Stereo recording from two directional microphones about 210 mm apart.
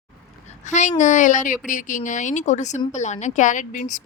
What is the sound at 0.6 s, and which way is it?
Speech, 35° left (ahead or behind).